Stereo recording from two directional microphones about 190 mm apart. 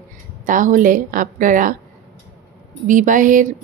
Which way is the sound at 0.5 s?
45° right (ahead or behind).